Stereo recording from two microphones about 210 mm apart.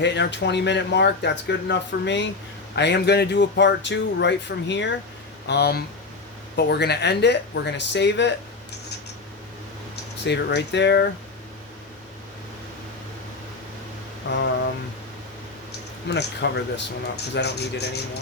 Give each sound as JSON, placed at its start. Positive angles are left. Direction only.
{"t": 0.0, "sound": "speech", "side_deg": 55}
{"t": 9.9, "sound": "speech", "side_deg": 55}
{"t": 14.3, "sound": "speech", "side_deg": 60}
{"t": 16.0, "sound": "speech", "side_deg": 55}